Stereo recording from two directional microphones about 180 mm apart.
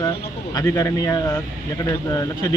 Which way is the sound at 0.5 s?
20° left (ahead or behind).